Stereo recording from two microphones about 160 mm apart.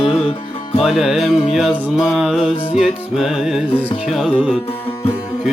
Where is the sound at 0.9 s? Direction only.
Centre (ahead or behind).